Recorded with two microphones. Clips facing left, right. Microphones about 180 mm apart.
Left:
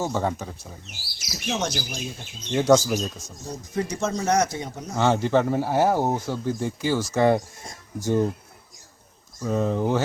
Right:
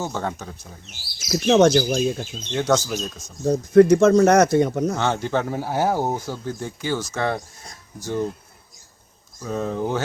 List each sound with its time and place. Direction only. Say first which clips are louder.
0.0 s speech: left 2 dB; 5° left (ahead or behind)
1.3 s speech: right 13 dB; 65° right (ahead or behind)
2.5 s speech: left 3 dB; 5° left (ahead or behind)
3.4 s speech: right 15 dB; 60° right (ahead or behind)
4.9 s speech: left 2 dB; 5° left (ahead or behind)
7.1 s speech: left 5 dB; 15° left (ahead or behind)
9.4 s speech: left 2 dB; centre (ahead or behind)